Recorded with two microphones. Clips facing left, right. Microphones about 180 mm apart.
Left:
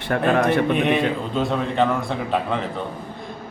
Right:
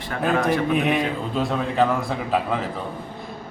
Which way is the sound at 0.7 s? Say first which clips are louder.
Left 2 dB; centre (ahead or behind).